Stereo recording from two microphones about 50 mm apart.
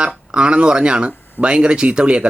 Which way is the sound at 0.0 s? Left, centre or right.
Centre.